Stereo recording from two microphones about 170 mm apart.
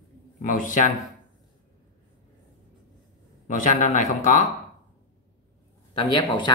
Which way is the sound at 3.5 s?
45° left (ahead or behind).